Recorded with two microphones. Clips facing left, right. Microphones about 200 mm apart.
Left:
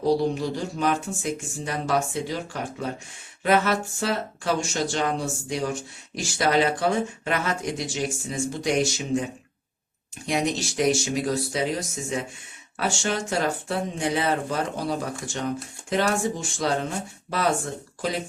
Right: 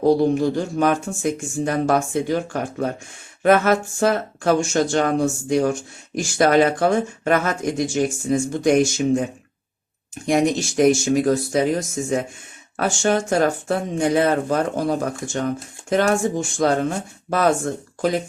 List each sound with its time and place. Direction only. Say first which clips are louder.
0.0 s speech: right 6 dB; 50° right (ahead or behind)
10.2 s speech: right 7 dB; 50° right (ahead or behind)